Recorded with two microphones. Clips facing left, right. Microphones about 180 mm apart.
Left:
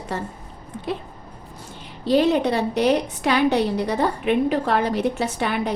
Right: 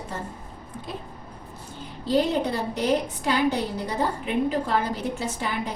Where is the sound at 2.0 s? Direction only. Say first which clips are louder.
Left 5 dB; 75° left (ahead or behind).